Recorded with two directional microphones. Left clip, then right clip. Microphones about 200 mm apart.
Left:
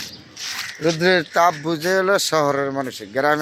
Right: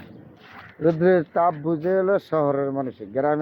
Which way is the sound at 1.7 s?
10° left (ahead or behind).